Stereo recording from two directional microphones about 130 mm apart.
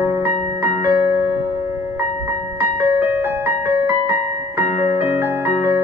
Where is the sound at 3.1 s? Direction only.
20° right (ahead or behind).